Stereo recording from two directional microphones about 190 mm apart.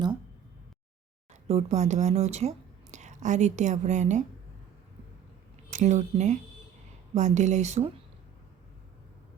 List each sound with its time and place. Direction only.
1.3 s speech: 35° right (ahead or behind)
5.7 s speech: 40° right (ahead or behind)